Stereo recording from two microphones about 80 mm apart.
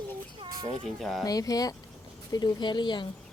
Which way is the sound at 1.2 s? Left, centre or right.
Left.